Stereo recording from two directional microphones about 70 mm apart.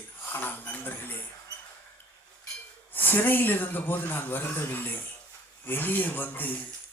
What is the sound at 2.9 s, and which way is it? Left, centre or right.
Speech, left.